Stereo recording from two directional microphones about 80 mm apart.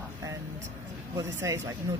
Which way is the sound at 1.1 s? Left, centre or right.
Right.